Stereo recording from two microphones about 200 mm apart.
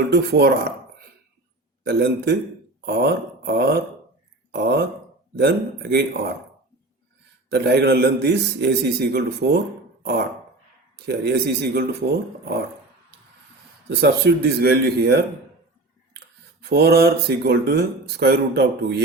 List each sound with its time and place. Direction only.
0.1 s speech: 55° right (ahead or behind)
1.8 s speech: 55° right (ahead or behind)
7.5 s speech: 55° right (ahead or behind)
10.0 s dog: 55° right (ahead or behind)
10.9 s speech: 55° right (ahead or behind)
13.9 s speech: 55° right (ahead or behind)
16.6 s speech: 55° right (ahead or behind)